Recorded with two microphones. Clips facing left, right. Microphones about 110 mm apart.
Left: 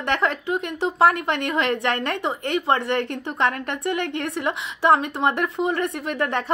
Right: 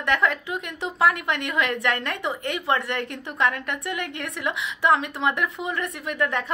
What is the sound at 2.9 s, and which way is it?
A woman's voice, 40° left (ahead or behind).